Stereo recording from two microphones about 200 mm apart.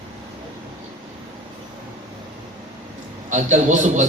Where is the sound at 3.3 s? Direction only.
40° right (ahead or behind).